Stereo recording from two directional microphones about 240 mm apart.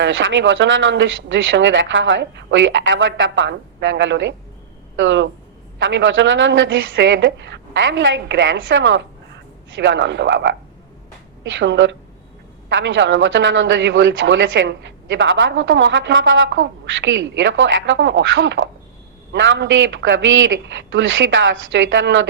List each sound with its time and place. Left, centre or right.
0.0 s a man's voice: right